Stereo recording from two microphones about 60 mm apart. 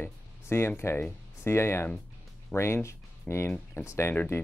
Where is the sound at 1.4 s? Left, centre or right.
Left.